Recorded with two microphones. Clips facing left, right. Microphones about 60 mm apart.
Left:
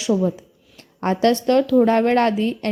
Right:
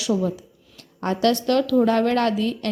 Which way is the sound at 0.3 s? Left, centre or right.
Left.